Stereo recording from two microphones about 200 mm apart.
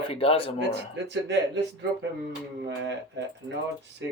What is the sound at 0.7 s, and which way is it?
Speech, 60° right (ahead or behind).